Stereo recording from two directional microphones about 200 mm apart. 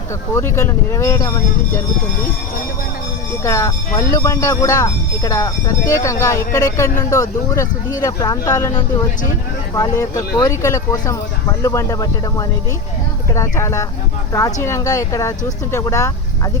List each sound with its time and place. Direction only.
0.3 s speech: 15° left (ahead or behind)
3.4 s speech: 15° left (ahead or behind)